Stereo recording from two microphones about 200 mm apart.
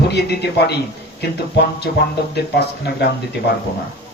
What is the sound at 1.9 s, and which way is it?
Speech, 55° left (ahead or behind).